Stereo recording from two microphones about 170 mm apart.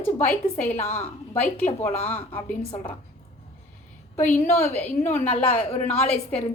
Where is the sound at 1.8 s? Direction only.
40° left (ahead or behind).